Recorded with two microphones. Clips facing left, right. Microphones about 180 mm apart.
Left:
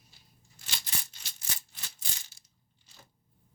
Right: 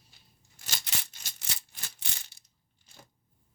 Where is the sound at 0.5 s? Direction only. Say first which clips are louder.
Right 2 dB; 45° right (ahead or behind).